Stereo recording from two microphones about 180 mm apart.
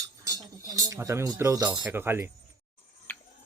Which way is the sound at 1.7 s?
10° right (ahead or behind).